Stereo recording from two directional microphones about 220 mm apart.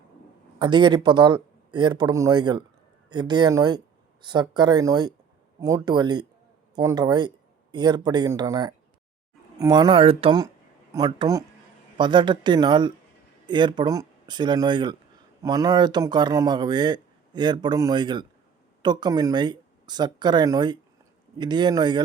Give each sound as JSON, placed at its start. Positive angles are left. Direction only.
{"t": 0.6, "sound": "speech", "side_deg": -20}